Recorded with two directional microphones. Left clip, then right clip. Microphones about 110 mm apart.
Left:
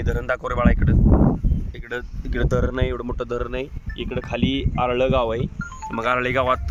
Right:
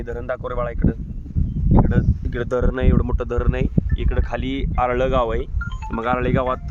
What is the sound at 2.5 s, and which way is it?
Speech, 90° right.